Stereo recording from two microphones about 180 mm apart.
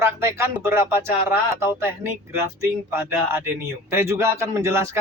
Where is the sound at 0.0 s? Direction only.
15° right (ahead or behind).